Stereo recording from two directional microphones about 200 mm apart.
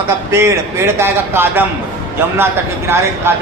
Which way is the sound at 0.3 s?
15° right (ahead or behind).